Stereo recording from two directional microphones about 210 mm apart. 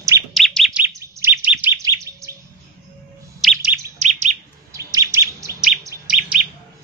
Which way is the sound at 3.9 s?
35° right (ahead or behind).